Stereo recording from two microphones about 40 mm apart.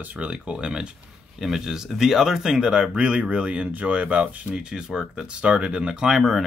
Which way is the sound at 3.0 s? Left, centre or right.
Right.